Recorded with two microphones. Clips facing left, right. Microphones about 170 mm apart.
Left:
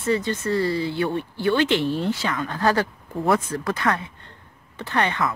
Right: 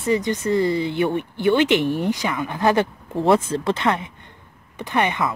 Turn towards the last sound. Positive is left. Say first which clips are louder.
# right 2 dB
turn(degrees=-15)  # may be behind; listen again after turning